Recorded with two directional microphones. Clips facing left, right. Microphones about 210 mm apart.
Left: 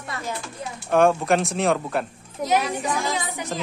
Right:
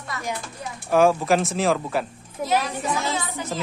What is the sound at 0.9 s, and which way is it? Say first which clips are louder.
Speech: even; centre (ahead or behind).